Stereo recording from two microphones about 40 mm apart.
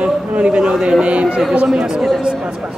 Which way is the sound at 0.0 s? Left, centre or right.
Right.